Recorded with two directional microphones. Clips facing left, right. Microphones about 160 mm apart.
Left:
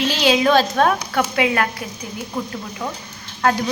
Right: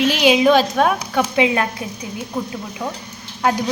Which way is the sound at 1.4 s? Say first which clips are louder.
Right 3 dB; 20° right (ahead or behind).